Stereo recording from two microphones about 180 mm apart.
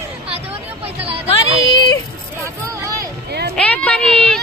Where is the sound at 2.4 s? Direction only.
15° right (ahead or behind).